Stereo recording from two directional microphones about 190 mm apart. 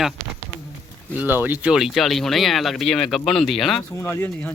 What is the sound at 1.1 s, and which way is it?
Speech, 10° right (ahead or behind).